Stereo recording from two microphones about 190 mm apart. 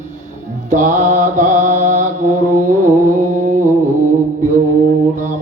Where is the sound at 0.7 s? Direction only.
45° right (ahead or behind).